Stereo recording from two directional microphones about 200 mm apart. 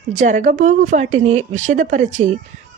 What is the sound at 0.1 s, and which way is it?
A woman's voice, 40° right (ahead or behind).